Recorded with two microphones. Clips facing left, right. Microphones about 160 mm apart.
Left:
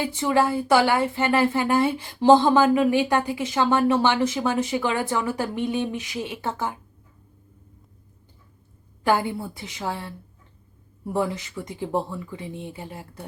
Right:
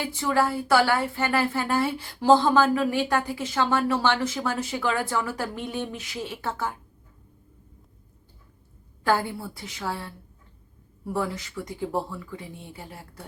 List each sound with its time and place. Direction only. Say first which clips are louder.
0.0 s a woman's voice: left 3 dB; 20° left (ahead or behind)
9.0 s a woman's voice: left 2 dB; 20° left (ahead or behind)